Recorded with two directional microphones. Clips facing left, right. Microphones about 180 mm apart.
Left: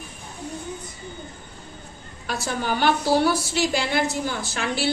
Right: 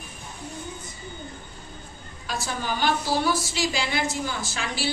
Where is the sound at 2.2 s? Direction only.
65° left (ahead or behind).